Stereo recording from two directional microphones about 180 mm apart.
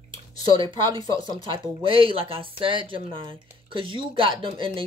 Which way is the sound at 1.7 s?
30° right (ahead or behind).